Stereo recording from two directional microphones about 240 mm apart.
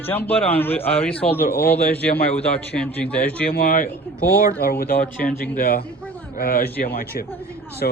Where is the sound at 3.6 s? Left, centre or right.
Left.